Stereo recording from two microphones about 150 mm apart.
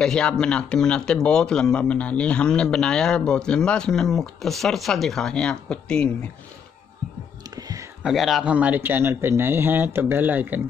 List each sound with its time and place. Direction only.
0.0 s speech: 5° left (ahead or behind)
7.5 s a sound: 25° right (ahead or behind)
8.0 s speech: centre (ahead or behind)